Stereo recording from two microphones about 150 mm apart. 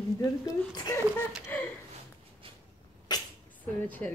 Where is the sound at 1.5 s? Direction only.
15° left (ahead or behind).